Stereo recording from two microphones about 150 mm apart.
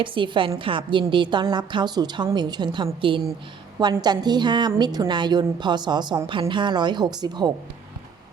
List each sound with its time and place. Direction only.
0.0 s a woman's voice: 35° right (ahead or behind)